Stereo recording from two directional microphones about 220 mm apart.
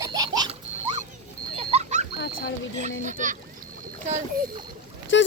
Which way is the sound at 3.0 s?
35° right (ahead or behind).